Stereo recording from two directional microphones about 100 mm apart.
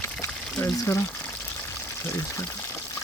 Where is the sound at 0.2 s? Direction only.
25° left (ahead or behind).